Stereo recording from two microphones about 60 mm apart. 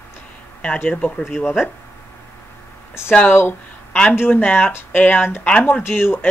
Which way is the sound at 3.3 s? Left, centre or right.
Left.